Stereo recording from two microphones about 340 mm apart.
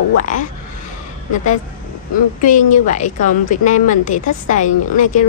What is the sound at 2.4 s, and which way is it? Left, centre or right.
A woman's voice, left.